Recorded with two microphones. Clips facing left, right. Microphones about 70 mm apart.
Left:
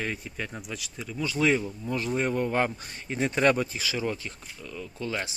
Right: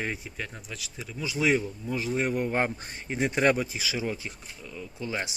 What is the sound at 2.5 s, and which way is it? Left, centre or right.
Speech, right.